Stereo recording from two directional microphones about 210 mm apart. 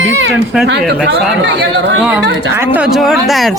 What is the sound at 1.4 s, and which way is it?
Speech, 55° right (ahead or behind).